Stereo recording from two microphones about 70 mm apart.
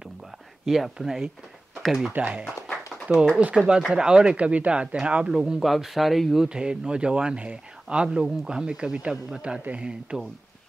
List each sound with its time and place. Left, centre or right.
0.7 s speech: centre
2.1 s speech: right